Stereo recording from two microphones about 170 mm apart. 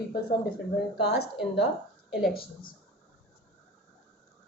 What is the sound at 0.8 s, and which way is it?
Speech, 75° left (ahead or behind).